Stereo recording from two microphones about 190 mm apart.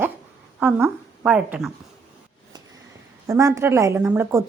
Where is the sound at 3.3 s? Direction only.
15° right (ahead or behind).